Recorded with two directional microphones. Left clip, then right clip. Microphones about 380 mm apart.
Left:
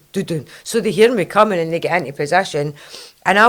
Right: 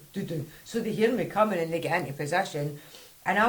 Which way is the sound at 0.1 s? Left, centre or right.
Left.